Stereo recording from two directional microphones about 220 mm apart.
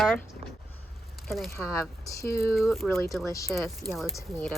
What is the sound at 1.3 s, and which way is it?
Speech, centre (ahead or behind).